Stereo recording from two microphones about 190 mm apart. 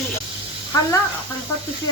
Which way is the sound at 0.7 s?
20° left (ahead or behind).